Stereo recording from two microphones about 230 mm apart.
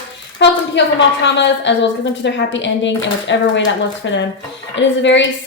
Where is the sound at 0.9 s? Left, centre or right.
Left.